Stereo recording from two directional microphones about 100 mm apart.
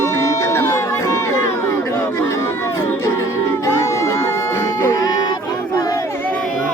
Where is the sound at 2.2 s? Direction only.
25° left (ahead or behind).